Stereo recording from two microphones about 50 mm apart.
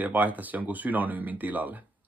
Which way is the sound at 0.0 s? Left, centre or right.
Right.